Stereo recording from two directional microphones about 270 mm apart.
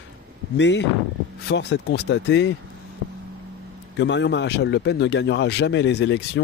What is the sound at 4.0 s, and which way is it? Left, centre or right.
Speech, left.